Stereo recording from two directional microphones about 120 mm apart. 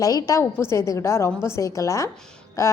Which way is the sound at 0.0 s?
30° left (ahead or behind).